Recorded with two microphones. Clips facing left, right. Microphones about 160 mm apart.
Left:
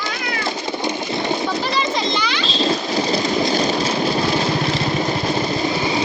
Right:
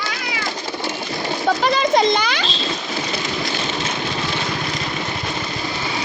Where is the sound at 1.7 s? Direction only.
50° right (ahead or behind).